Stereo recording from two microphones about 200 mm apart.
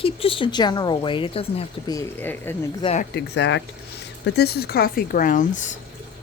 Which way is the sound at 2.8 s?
35° left (ahead or behind).